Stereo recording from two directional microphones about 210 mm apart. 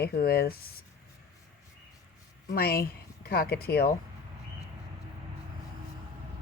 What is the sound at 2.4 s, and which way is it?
Speech, 45° left (ahead or behind).